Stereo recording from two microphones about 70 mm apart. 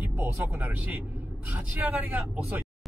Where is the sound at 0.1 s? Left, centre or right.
Right.